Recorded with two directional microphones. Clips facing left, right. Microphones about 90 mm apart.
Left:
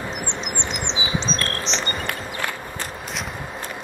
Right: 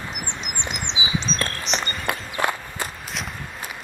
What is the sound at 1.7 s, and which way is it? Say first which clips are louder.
Cricket: right 3 dB; 25° left (ahead or behind).